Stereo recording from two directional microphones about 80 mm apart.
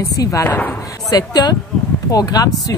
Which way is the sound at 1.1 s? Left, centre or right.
Left.